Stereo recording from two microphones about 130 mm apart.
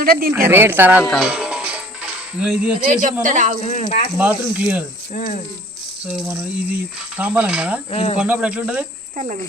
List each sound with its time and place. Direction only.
0.3 s speech: 15° right (ahead or behind)
1.0 s speech: 5° left (ahead or behind)
1.3 s music: 5° right (ahead or behind)
2.4 s speech: 10° right (ahead or behind)
2.8 s speech: 75° right (ahead or behind)
3.6 s speech: 55° left (ahead or behind)
4.2 s speech: 10° right (ahead or behind)
5.1 s speech: 75° left (ahead or behind)
6.1 s speech: centre (ahead or behind)
7.9 s speech: 50° left (ahead or behind)
8.2 s speech: 10° right (ahead or behind)
9.1 s speech: 75° right (ahead or behind)